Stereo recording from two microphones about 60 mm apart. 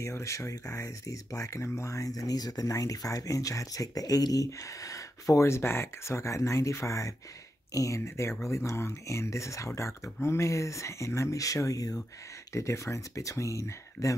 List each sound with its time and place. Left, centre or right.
0.0 s speech: left
12.5 s speech: left